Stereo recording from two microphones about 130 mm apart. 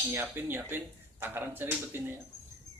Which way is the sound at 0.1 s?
15° right (ahead or behind).